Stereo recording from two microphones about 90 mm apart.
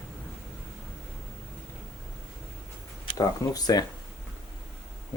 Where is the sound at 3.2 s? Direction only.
45° left (ahead or behind).